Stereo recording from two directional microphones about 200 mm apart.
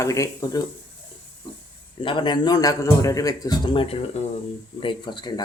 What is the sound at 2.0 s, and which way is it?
A man's voice, 25° left (ahead or behind).